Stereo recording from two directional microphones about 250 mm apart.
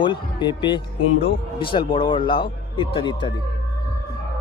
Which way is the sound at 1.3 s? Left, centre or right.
Centre.